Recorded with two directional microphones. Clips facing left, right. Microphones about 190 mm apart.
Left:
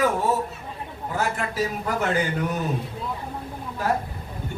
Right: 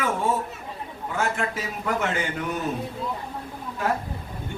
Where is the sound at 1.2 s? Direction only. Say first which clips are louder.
Left 2 dB; 35° left (ahead or behind).